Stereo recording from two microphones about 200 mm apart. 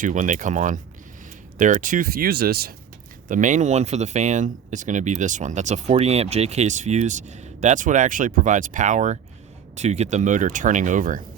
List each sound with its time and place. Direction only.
0.0 s speech: 40° right (ahead or behind)
3.2 s speech: 40° right (ahead or behind)